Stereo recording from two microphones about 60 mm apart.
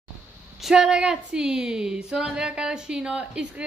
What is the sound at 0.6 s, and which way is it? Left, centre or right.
Speech, centre.